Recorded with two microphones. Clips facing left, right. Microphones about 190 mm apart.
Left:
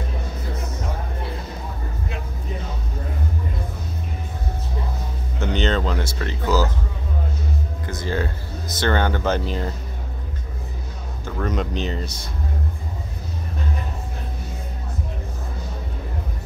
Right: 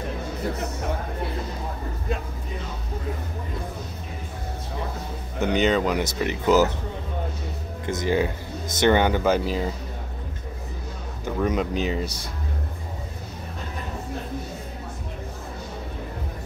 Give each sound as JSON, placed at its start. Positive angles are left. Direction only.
{"t": 5.4, "sound": "speech", "side_deg": -10}
{"t": 7.8, "sound": "speech", "side_deg": -20}
{"t": 11.2, "sound": "speech", "side_deg": -10}